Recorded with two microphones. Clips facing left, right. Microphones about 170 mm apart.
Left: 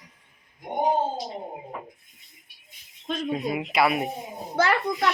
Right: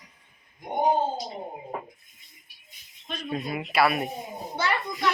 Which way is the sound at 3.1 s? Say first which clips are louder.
Left 7 dB; 90° left.